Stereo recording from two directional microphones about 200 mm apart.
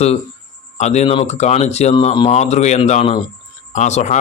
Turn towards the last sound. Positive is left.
turn(degrees=35)  # may be behind; listen again after turning